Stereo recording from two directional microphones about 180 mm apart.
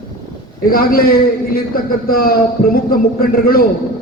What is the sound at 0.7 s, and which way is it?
A man's voice, 55° left (ahead or behind).